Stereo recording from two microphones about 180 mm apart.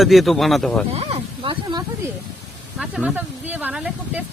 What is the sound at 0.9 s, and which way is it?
Speech, 35° right (ahead or behind).